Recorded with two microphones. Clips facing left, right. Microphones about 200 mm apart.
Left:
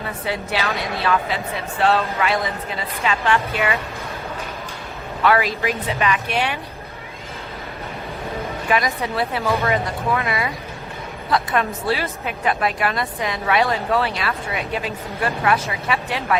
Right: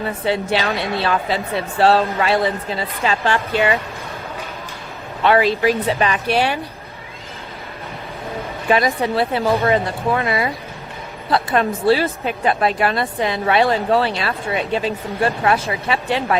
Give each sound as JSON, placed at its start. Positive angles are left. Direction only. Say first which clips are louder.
{"t": 0.3, "sound": "speech", "louder": "right 5 dB", "side_deg": -30}
{"t": 5.2, "sound": "speech", "louder": "right 4 dB", "side_deg": -25}
{"t": 8.7, "sound": "a woman's voice", "louder": "right 5 dB", "side_deg": -30}